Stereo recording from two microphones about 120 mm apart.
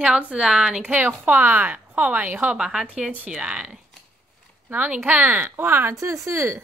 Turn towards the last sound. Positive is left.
turn(degrees=-25)  # may be behind; listen again after turning